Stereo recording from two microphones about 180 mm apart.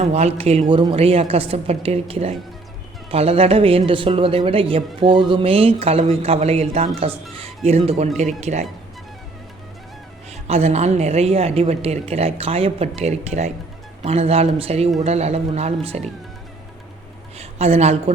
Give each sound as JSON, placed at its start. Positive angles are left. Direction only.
{"t": 0.0, "sound": "a woman's voice", "side_deg": -35}
{"t": 10.4, "sound": "a woman's voice", "side_deg": -35}
{"t": 17.3, "sound": "a sound", "side_deg": -35}